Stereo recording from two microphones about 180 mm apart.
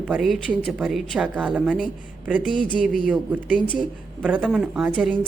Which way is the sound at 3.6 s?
5° left (ahead or behind).